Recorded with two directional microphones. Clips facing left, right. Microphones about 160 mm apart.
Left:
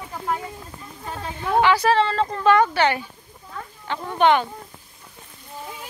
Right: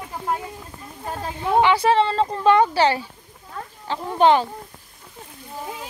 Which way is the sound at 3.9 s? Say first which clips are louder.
Right 2 dB; 30° right (ahead or behind).